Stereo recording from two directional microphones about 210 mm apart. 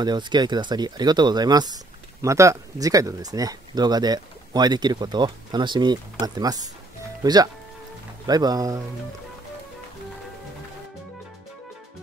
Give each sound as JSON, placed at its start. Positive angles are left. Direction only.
{"t": 0.0, "sound": "speech", "side_deg": -20}